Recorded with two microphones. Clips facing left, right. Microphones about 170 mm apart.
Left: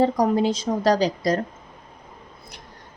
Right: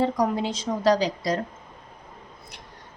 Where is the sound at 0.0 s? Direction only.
40° left (ahead or behind).